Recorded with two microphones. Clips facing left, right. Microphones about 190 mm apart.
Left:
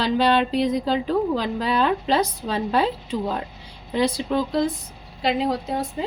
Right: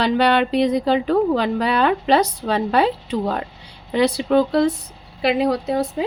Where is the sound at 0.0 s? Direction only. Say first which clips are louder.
Right 2 dB; 65° right (ahead or behind).